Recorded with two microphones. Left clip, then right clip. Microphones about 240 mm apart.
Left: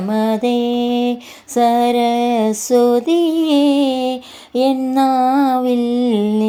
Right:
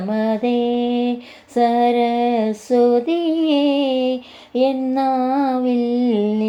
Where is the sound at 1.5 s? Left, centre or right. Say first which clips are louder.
Left 2 dB; left.